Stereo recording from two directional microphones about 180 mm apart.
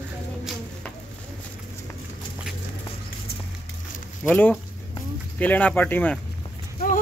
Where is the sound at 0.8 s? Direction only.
5° left (ahead or behind).